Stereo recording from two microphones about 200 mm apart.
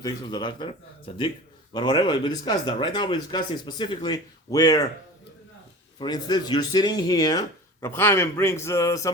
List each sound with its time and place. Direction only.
0.0 s speech: 20° left (ahead or behind)
6.0 s speech: 20° left (ahead or behind)